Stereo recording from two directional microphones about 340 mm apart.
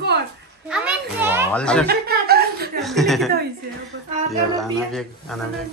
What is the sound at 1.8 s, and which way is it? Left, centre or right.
Chuckle, right.